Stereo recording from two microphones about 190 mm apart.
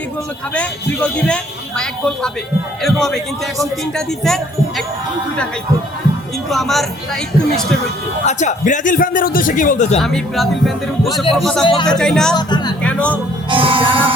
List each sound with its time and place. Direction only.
1.3 s speech: 5° left (ahead or behind)
6.5 s speech: centre (ahead or behind)
8.2 s a man's voice: 40° left (ahead or behind)
10.0 s speech: centre (ahead or behind)
11.6 s speech: 25° left (ahead or behind)
11.9 s speech: 5° left (ahead or behind)
12.3 s speech: 20° left (ahead or behind)
12.8 s speech: 5° left (ahead or behind)
13.5 s music: 25° right (ahead or behind)